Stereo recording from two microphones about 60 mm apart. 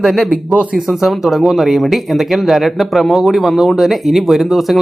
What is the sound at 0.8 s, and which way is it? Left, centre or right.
Speech, centre.